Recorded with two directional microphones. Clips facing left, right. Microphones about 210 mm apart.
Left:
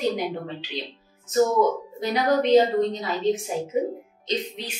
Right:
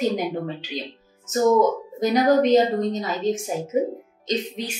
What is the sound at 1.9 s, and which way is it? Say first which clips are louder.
A woman's voice: right 6 dB; 45° right (ahead or behind).